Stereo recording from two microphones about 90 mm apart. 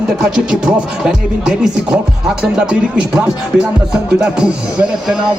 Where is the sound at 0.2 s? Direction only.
10° right (ahead or behind).